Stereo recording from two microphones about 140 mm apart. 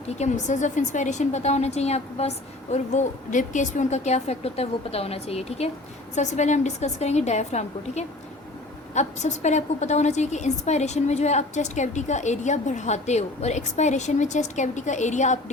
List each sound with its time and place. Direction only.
0.2 s speech: 60° left (ahead or behind)
2.7 s a woman's voice: 60° left (ahead or behind)